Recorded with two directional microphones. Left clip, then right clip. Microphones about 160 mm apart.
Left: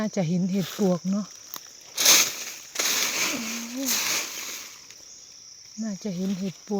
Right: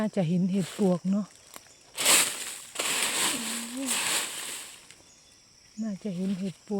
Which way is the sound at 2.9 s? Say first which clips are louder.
Left 2 dB; 15° left (ahead or behind).